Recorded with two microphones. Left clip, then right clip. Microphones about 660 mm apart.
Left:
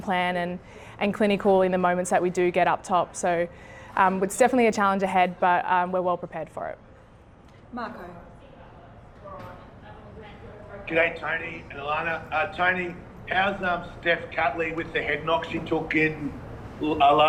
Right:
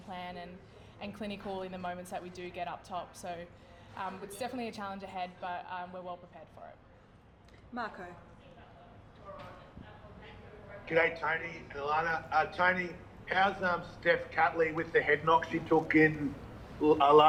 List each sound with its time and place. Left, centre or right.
0.1 s a woman's voice: left
7.7 s a woman's voice: right
10.8 s a man's voice: right
16.8 s a man's voice: right